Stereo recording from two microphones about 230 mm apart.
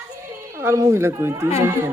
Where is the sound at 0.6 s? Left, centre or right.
Centre.